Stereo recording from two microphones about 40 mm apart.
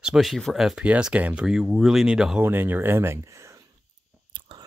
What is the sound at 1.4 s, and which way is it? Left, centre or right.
Speech, centre.